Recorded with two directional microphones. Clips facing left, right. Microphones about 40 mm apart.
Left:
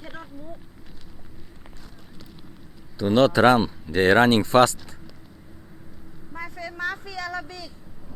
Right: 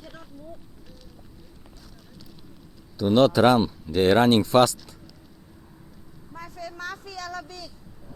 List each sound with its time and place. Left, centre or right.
0.0 s a sound: left
3.1 s speech: left
4.0 s speech: left
6.3 s vehicle: left